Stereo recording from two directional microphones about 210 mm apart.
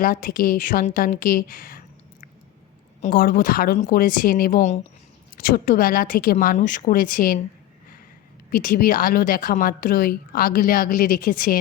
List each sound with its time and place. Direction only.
0.0 s speech: 45° left (ahead or behind)
3.0 s a woman's voice: 45° left (ahead or behind)
8.4 s speech: 40° left (ahead or behind)